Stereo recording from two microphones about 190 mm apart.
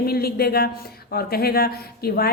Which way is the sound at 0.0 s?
55° left (ahead or behind).